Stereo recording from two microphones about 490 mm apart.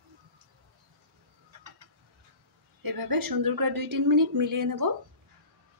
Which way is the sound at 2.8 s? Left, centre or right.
Right.